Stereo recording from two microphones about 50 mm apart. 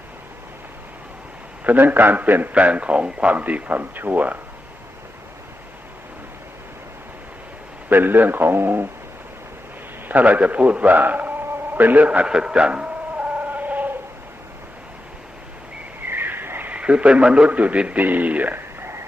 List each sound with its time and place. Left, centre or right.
1.6 s a man's voice: right
7.9 s a man's voice: right
10.1 s a man's voice: right
12.3 s a sound: centre; by 13.9 s right
16.0 s a sound: right
16.7 s speech: right
18.5 s radio: right